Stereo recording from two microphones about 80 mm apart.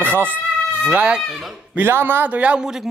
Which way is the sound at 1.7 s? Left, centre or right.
Right.